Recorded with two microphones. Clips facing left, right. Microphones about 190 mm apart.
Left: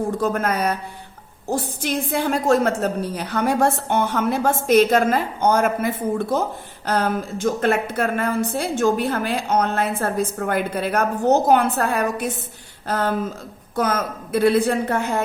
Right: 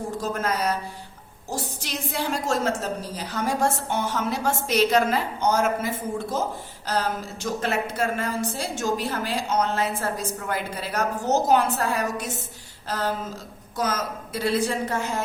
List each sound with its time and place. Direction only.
0.2 s a woman's voice: 60° left (ahead or behind)